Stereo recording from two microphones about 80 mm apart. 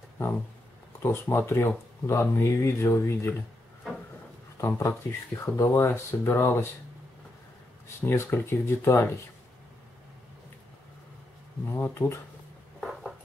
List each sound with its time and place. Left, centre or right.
1.0 s speech: left
4.6 s speech: left
8.0 s speech: left
11.6 s a sound: left